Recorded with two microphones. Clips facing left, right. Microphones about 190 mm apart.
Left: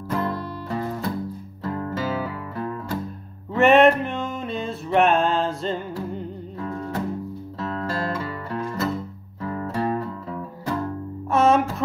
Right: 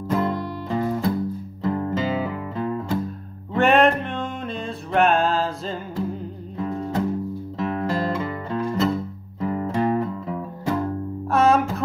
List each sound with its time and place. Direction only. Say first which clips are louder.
0.1 s music: right 3 dB; 20° right (ahead or behind)
3.5 s music: left 2 dB; centre (ahead or behind)
6.6 s music: right 4 dB; 20° right (ahead or behind)
11.2 s music: even; centre (ahead or behind)